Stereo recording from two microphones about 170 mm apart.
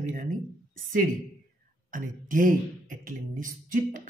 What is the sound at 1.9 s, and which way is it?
Speech, 50° right (ahead or behind).